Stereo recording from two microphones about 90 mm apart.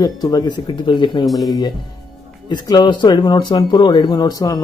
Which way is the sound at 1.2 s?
Centre (ahead or behind).